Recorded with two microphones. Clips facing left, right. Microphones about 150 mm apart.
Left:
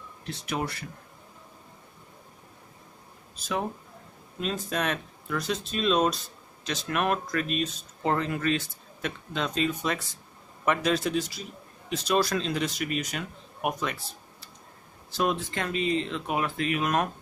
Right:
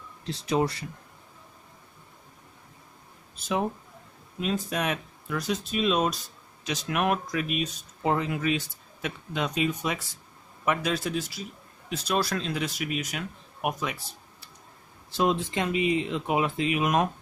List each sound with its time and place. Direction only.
0.2 s speech: 25° right (ahead or behind)
4.4 s speech: 10° right (ahead or behind)
15.1 s speech: 20° right (ahead or behind)